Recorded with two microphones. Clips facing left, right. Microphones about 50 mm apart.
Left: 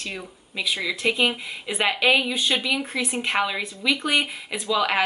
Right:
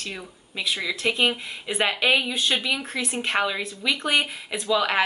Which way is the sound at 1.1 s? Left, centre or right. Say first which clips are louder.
Even; centre.